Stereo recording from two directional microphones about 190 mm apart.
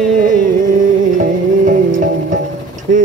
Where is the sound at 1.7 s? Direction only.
45° right (ahead or behind).